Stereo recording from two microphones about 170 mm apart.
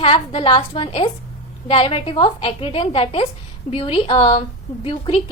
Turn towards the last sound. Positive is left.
turn(degrees=30)  # may be behind; listen again after turning